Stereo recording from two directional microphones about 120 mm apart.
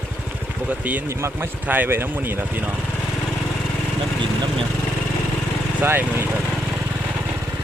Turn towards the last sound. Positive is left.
turn(degrees=-20)  # may be behind; listen again after turning